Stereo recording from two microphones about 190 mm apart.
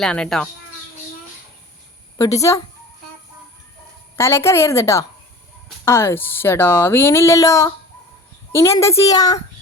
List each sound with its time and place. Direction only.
0.0 s speech: 5° left (ahead or behind)
2.1 s a woman's voice: 15° left (ahead or behind)
4.2 s speech: 15° left (ahead or behind)